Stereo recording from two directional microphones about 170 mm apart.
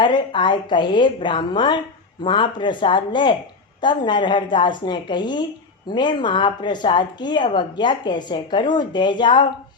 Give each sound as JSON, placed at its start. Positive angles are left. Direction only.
{"t": 0.0, "sound": "a woman's voice", "side_deg": 30}